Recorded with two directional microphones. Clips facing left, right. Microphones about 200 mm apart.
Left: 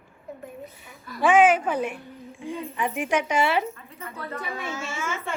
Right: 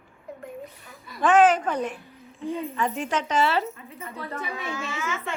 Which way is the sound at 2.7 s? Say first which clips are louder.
Left 5 dB; 15° left (ahead or behind).